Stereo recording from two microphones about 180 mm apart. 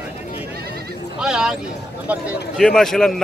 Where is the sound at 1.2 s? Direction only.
5° right (ahead or behind).